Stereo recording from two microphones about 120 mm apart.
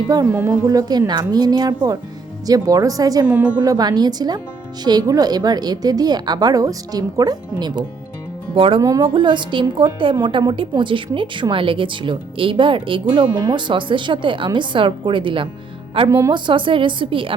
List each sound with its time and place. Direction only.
0.1 s a woman's voice: 30° right (ahead or behind)
3.2 s a woman's voice: 10° right (ahead or behind)
3.6 s a woman's voice: 35° right (ahead or behind)
8.5 s a woman's voice: 50° right (ahead or behind)
16.0 s a woman's voice: 25° right (ahead or behind)
16.3 s a woman's voice: 45° right (ahead or behind)